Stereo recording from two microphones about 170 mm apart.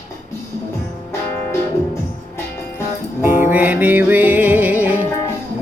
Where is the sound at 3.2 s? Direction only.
10° right (ahead or behind).